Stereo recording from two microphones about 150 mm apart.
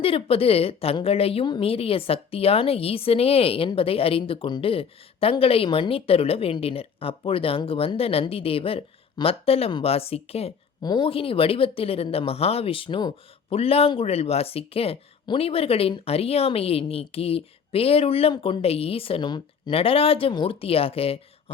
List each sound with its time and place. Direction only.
0.0 s speech: 40° left (ahead or behind)